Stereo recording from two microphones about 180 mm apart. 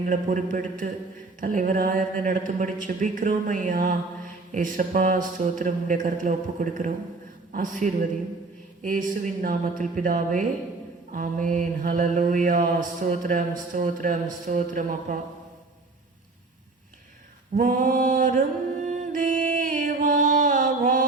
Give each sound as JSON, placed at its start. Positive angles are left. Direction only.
{"t": 0.0, "sound": "mantra", "side_deg": -45}
{"t": 17.5, "sound": "mantra", "side_deg": -50}